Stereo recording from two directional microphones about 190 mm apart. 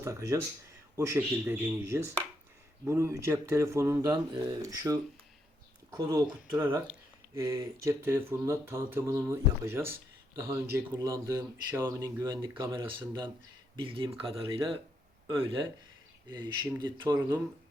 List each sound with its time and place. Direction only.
0.0 s speech: 15° right (ahead or behind)
6.0 s speech: 15° right (ahead or behind)
13.7 s speech: 25° right (ahead or behind)